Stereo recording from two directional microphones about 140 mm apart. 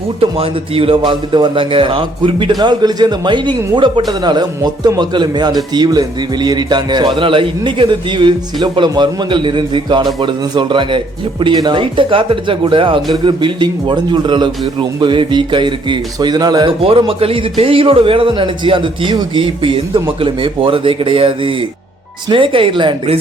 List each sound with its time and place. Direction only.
0.2 s a man's voice: 40° right (ahead or behind)